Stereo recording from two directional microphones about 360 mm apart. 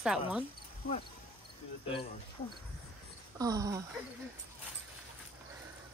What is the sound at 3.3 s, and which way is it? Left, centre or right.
Speech, centre.